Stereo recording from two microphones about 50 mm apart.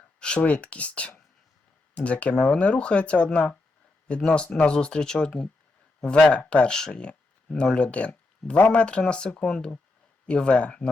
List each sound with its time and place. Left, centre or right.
0.2 s speech: left